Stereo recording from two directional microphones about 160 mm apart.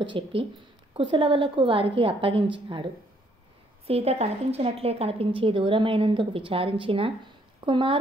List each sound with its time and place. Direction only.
0.0 s a woman's voice: 35° right (ahead or behind)